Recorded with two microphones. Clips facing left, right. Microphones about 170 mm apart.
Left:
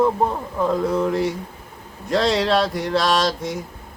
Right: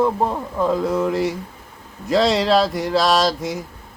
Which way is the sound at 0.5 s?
Centre (ahead or behind).